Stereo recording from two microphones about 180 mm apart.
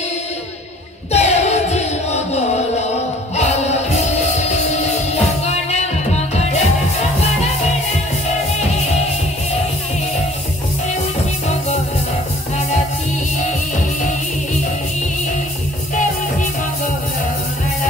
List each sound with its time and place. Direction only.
1.1 s music: 35° left (ahead or behind)